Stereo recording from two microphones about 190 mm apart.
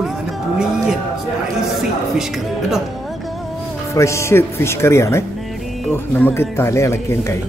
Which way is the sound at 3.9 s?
15° left (ahead or behind).